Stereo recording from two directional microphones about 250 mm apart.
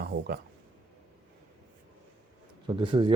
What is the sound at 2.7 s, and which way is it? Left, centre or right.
Speech, centre.